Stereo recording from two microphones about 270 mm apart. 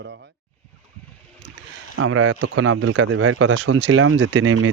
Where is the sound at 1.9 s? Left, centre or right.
Right.